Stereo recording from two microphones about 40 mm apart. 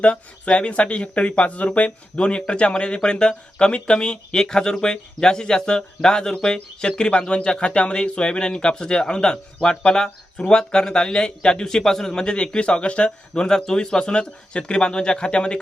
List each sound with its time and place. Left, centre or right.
0.0 s speech: left